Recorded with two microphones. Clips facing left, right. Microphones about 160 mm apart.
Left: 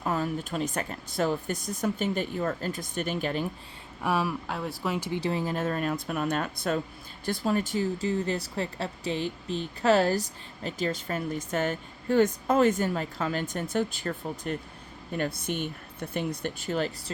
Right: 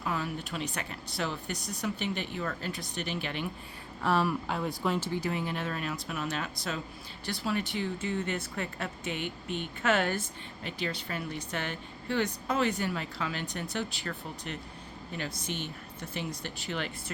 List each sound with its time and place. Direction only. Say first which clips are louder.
0.0 s speech: left 5 dB; 40° left (ahead or behind)
4.0 s speech: even; 10° left (ahead or behind)
4.9 s speech: left 1 dB; 15° left (ahead or behind)
5.2 s speech: left 4 dB; 35° left (ahead or behind)